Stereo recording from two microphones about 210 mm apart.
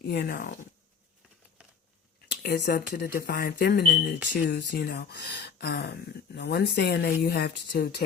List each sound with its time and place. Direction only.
0.0 s speech: 50° left (ahead or behind)
2.2 s speech: 50° left (ahead or behind)